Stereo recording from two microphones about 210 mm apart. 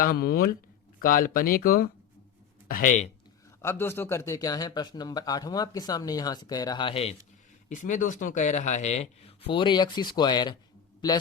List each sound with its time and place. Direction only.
0.0 s speech: 50° left (ahead or behind)
3.6 s a man's voice: 10° left (ahead or behind)